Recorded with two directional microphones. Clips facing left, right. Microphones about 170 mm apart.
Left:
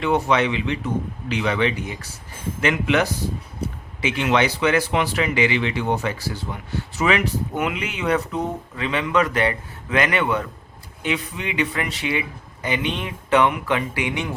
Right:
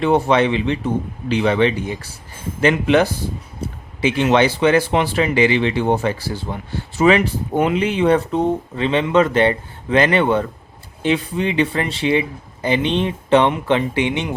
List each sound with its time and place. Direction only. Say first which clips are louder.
0.0 s speech: right 4 dB; 30° right (ahead or behind)